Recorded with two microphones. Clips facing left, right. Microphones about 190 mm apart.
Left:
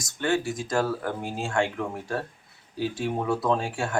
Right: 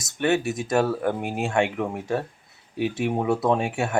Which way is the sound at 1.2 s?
65° right (ahead or behind).